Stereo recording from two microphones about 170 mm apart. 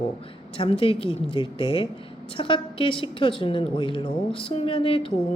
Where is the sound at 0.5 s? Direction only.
30° left (ahead or behind).